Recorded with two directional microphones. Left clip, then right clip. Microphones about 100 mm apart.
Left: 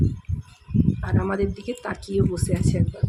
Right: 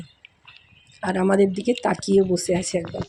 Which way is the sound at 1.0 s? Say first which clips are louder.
Right 11 dB; 50° right (ahead or behind).